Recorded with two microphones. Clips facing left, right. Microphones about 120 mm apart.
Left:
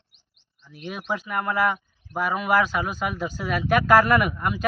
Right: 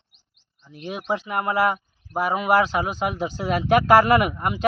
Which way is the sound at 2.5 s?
35° right (ahead or behind).